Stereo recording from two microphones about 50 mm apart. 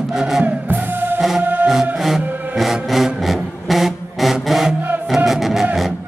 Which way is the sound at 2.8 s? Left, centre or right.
Centre.